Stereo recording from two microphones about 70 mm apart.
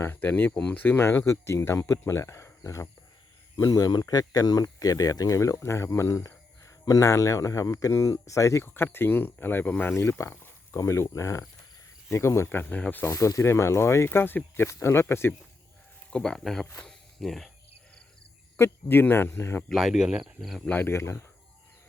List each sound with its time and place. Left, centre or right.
0.0 s speech: left
3.6 s speech: left
8.6 s speech: left
12.5 s speech: left
13.1 s speech: left
16.0 s speech: centre
16.7 s cricket: centre
18.5 s speech: left
19.7 s speech: centre
20.8 s speech: left